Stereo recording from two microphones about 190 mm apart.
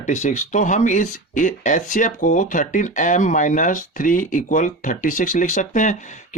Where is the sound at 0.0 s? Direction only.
40° left (ahead or behind).